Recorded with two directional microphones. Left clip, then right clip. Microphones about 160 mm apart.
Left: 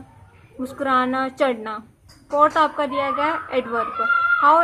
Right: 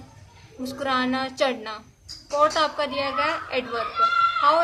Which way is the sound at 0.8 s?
35° left (ahead or behind).